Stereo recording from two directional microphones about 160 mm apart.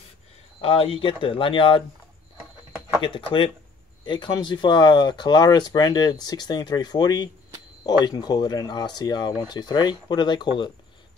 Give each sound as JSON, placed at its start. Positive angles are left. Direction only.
{"t": 0.6, "sound": "speech", "side_deg": 35}
{"t": 3.0, "sound": "speech", "side_deg": 30}